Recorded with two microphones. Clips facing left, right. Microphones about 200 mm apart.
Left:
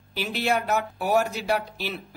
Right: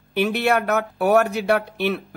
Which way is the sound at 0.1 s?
60° right (ahead or behind).